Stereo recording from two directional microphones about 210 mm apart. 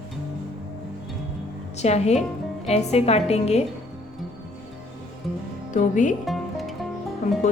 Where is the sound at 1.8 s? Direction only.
30° left (ahead or behind).